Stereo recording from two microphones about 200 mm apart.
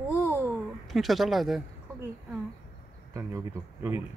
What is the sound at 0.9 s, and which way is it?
Speech, centre (ahead or behind).